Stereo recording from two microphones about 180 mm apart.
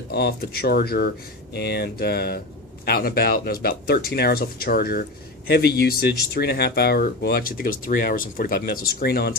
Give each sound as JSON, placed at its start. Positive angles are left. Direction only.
{"t": 0.1, "sound": "speech", "side_deg": 65}